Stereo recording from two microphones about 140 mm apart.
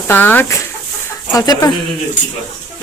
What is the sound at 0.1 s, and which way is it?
Speech, 15° left (ahead or behind).